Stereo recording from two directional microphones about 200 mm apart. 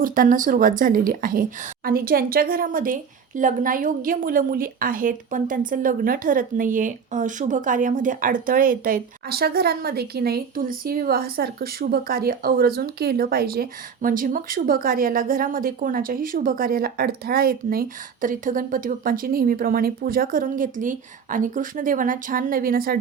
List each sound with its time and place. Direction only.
0.0 s speech: 45° right (ahead or behind)